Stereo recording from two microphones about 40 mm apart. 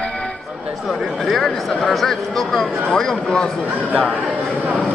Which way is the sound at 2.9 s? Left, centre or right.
Centre.